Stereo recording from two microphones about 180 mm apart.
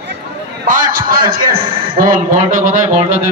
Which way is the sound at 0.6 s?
50° right (ahead or behind).